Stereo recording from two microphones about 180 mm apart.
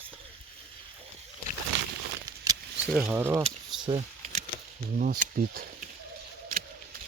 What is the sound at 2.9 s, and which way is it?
Speech, 10° right (ahead or behind).